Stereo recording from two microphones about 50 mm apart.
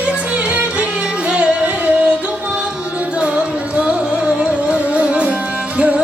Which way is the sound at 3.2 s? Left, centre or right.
Right.